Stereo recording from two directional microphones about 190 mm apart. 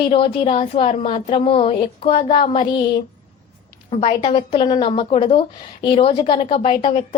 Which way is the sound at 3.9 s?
30° left (ahead or behind).